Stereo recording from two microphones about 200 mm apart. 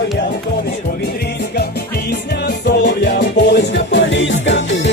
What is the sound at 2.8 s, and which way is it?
Music, 55° left (ahead or behind).